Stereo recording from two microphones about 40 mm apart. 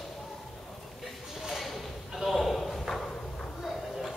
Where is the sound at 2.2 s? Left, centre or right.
Centre.